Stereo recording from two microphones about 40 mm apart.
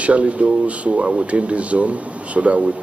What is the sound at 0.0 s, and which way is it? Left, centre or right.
Speech, right.